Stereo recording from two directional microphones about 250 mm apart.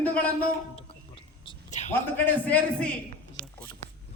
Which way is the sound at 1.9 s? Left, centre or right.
Centre.